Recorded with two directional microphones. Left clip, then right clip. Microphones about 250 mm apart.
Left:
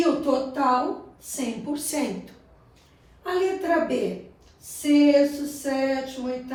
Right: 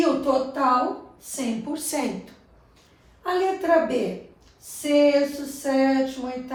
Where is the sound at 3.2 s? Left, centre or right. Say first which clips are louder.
Right 1 dB; centre.